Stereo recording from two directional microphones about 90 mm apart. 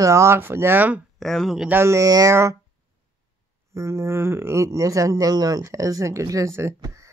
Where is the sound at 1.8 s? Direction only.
35° right (ahead or behind).